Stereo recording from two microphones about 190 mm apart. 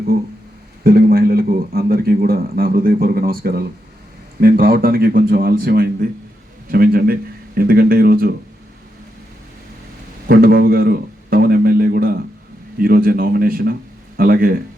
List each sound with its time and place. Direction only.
0.9 s a man's voice: 55° right (ahead or behind)
10.2 s a man's voice: 55° right (ahead or behind)